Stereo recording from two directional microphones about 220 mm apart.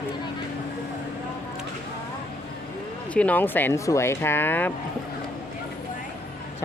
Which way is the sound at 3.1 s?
5° left (ahead or behind).